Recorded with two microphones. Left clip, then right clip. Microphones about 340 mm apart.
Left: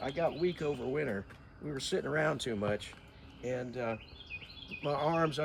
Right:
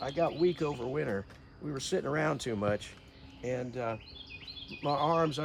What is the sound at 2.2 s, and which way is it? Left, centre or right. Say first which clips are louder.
Speech: right 1 dB; right.